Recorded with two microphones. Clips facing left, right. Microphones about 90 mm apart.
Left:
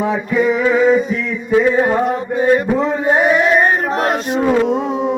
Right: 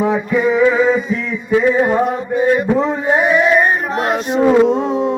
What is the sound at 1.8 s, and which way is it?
Mantra, 15° right (ahead or behind).